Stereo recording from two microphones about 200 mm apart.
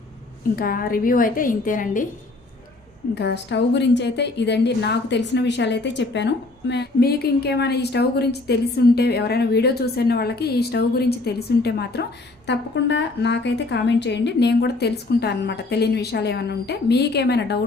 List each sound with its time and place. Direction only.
0.5 s a woman's voice: 45° left (ahead or behind)
3.2 s a woman's voice: 60° left (ahead or behind)